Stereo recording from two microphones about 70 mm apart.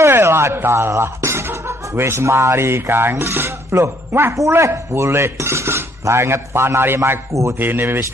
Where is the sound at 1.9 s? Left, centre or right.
Right.